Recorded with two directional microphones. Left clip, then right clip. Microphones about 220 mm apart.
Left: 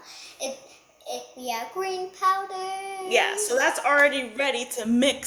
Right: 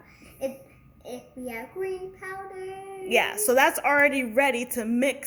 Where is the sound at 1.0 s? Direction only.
50° left (ahead or behind).